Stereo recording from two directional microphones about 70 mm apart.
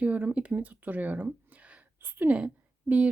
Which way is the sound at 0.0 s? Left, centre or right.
Right.